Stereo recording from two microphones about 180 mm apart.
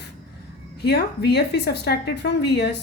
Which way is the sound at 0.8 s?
65° left (ahead or behind).